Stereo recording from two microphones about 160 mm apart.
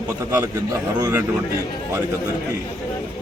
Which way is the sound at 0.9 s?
20° right (ahead or behind).